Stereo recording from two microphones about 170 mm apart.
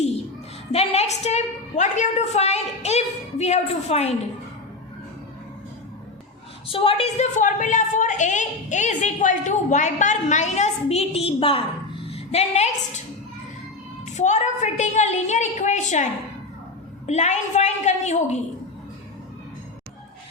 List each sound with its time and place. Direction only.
0.7 s a woman's voice: 40° left (ahead or behind)
6.7 s a woman's voice: 30° left (ahead or behind)
14.2 s a woman's voice: 45° left (ahead or behind)
17.1 s a woman's voice: 45° left (ahead or behind)